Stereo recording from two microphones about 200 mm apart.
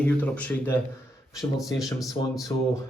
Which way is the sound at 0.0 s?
10° left (ahead or behind).